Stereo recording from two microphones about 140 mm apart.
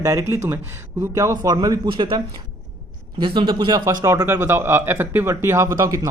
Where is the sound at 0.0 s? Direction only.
20° right (ahead or behind).